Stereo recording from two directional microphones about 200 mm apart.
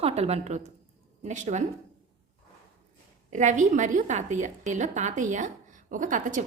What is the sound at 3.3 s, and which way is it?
A woman's voice, 40° right (ahead or behind).